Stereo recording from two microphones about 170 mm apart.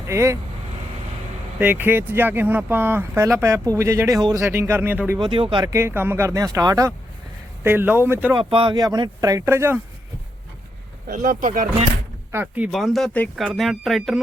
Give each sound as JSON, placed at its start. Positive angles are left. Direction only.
{"t": 0.1, "sound": "speech", "side_deg": -15}
{"t": 1.5, "sound": "speech", "side_deg": -10}
{"t": 5.2, "sound": "speech", "side_deg": -30}
{"t": 5.6, "sound": "speech", "side_deg": -15}
{"t": 8.4, "sound": "speech", "side_deg": -30}
{"t": 11.0, "sound": "speech", "side_deg": -50}
{"t": 12.3, "sound": "speech", "side_deg": -10}